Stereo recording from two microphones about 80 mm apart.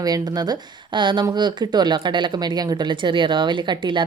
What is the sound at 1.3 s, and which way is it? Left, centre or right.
A woman's voice, right.